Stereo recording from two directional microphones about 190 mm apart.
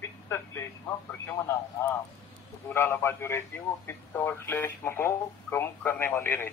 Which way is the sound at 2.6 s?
10° left (ahead or behind).